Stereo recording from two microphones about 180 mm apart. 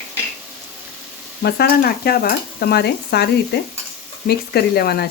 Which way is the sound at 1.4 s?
60° left (ahead or behind).